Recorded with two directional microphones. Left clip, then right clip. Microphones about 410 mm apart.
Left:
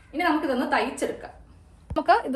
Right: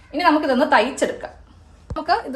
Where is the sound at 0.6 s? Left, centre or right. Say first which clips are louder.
Right 8 dB; centre.